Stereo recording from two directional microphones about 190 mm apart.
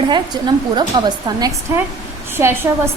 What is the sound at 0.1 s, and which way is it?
A woman's voice, 20° right (ahead or behind).